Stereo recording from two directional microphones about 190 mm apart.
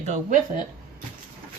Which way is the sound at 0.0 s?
40° right (ahead or behind).